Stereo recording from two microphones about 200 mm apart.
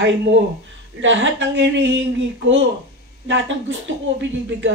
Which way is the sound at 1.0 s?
65° right (ahead or behind).